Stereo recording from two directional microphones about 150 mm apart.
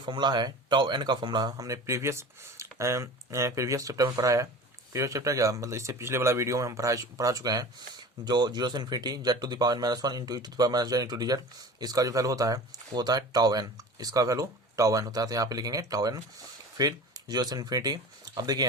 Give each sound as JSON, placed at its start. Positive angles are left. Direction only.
{"t": 0.0, "sound": "speech", "side_deg": -30}